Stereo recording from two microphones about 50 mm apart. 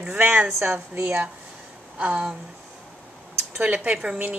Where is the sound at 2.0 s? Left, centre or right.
Right.